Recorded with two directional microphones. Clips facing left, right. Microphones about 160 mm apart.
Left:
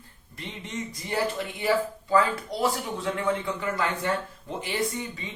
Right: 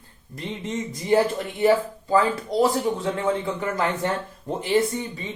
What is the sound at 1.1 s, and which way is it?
Speech, 40° right (ahead or behind).